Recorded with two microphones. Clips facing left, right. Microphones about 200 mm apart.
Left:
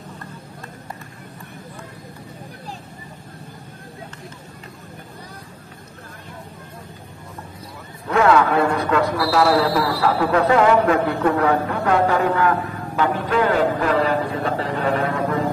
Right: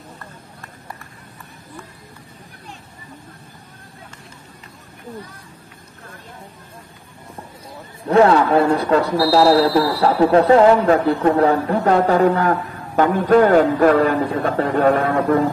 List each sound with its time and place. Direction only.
8.1 s a man's voice: 35° right (ahead or behind); by 15.4 s 55° right (ahead or behind)